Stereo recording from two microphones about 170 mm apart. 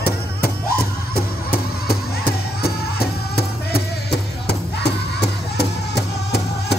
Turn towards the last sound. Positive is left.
turn(degrees=75)  # may be behind; listen again after turning